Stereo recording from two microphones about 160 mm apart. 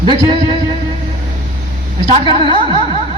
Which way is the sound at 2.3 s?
35° right (ahead or behind).